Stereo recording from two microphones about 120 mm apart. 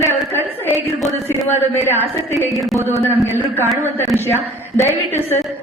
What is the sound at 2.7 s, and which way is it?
Speech, 25° right (ahead or behind).